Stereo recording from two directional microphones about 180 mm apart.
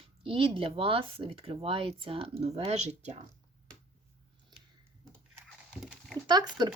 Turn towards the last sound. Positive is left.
turn(degrees=-20)  # may be behind; listen again after turning